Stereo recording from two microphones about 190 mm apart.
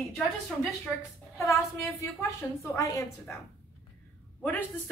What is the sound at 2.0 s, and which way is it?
A woman's voice, 15° left (ahead or behind).